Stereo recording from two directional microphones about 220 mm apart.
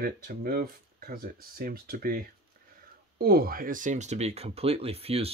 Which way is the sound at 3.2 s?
45° right (ahead or behind).